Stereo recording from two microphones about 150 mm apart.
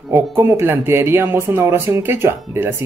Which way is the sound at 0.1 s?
15° right (ahead or behind).